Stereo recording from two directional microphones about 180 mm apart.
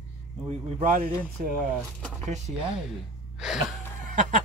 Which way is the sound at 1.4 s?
50° right (ahead or behind).